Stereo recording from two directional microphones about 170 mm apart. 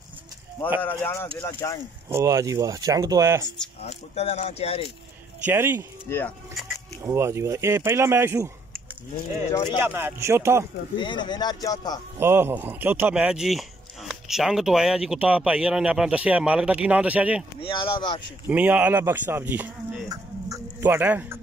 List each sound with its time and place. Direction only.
0.8 s speech: 15° left (ahead or behind)
2.0 s speech: 15° right (ahead or behind)
3.8 s speech: 40° left (ahead or behind)
5.4 s speech: 10° right (ahead or behind)
6.0 s speech: 15° left (ahead or behind)
7.1 s speech: 15° right (ahead or behind)
9.8 s speech: 10° right (ahead or behind)
11.0 s speech: 25° left (ahead or behind)
12.2 s speech: 15° right (ahead or behind)
17.6 s speech: 30° left (ahead or behind)
18.5 s speech: 10° right (ahead or behind)